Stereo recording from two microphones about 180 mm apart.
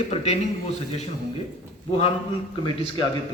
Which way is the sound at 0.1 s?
35° left (ahead or behind).